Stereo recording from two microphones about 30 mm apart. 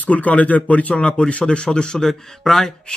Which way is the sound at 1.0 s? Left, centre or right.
Left.